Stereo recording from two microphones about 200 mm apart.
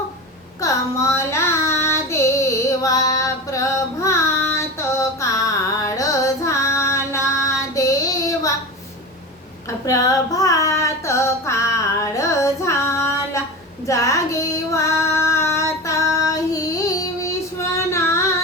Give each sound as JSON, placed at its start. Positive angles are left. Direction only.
{"t": 0.6, "sound": "child singing", "side_deg": 15}
{"t": 5.8, "sound": "female singing", "side_deg": 15}
{"t": 9.6, "sound": "female singing", "side_deg": 15}